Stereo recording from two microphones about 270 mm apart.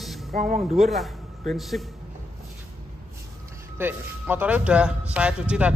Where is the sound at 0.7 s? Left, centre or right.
Centre.